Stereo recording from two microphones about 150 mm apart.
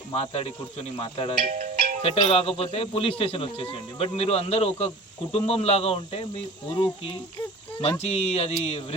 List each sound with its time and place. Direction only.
0.1 s a man's voice: 45° left (ahead or behind)
1.5 s music: 80° right
2.0 s a man's voice: 40° left (ahead or behind)